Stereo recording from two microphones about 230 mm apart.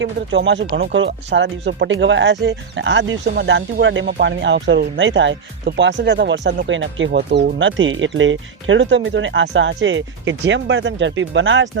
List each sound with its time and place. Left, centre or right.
0.0 s speech: right